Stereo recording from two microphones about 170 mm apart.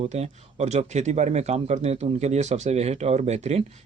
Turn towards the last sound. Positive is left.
turn(degrees=-40)  # may be behind; listen again after turning